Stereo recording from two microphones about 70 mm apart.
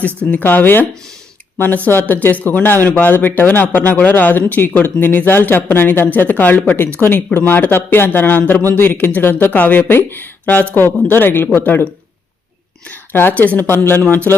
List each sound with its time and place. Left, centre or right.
0.3 s speech: left
12.9 s speech: left